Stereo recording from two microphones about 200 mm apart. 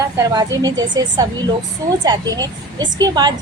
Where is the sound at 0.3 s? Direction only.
20° right (ahead or behind).